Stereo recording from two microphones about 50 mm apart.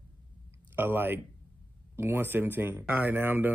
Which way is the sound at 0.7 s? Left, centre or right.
Right.